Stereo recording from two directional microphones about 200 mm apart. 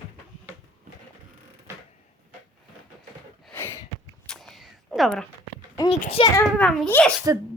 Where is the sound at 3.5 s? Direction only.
15° left (ahead or behind).